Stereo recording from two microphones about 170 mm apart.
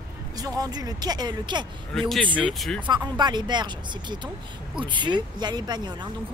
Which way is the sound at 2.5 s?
5° left (ahead or behind).